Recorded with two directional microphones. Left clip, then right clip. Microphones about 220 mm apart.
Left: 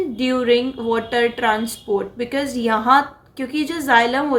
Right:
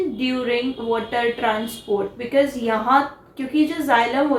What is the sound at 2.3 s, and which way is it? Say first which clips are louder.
Speech: right 2 dB; 40° left (ahead or behind).